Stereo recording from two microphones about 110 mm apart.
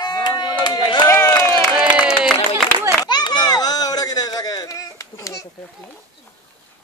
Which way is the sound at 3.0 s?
40° left (ahead or behind).